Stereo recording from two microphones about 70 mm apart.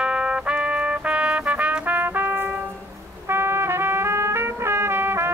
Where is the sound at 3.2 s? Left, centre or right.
Right.